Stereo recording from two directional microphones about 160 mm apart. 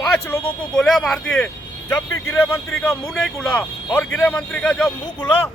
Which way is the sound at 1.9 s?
15° left (ahead or behind).